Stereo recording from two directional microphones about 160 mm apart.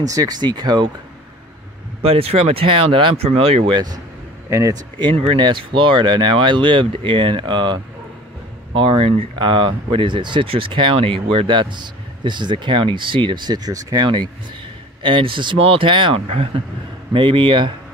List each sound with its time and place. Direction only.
0.0 s a man's voice: 20° right (ahead or behind)
2.0 s speech: 35° right (ahead or behind)
4.5 s speech: 20° right (ahead or behind)
4.9 s a man's voice: 30° right (ahead or behind)